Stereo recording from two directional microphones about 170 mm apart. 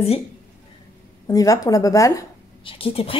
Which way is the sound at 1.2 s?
20° left (ahead or behind).